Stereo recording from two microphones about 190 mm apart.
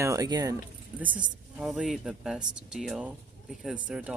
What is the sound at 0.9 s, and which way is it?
Speech, 10° right (ahead or behind).